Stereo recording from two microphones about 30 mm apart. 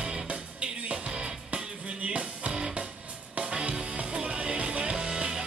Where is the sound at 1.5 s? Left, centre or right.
Right.